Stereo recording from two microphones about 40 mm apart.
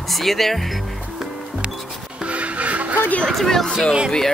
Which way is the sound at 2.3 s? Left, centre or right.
Right.